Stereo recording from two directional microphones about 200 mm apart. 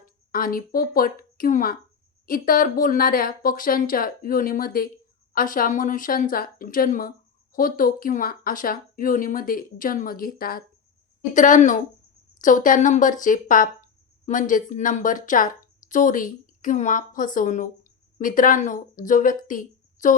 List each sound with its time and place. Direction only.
0.3 s a woman's voice: 45° left (ahead or behind)